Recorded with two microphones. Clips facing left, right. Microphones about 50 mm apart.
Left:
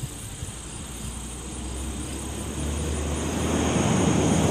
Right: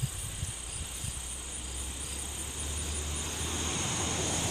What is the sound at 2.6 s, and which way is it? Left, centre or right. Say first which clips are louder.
Vehicle: left 11 dB; left.